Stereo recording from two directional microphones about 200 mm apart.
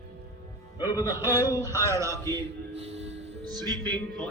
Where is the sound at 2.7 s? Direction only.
30° right (ahead or behind).